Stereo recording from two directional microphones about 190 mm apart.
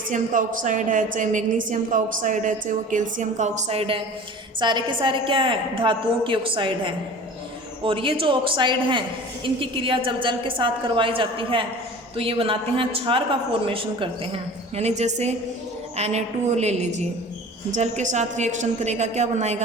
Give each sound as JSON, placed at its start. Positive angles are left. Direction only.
{"t": 0.1, "sound": "a woman's voice", "side_deg": -40}